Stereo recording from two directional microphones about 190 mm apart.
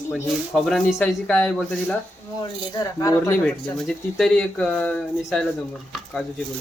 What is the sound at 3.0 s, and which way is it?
Speech, 15° left (ahead or behind).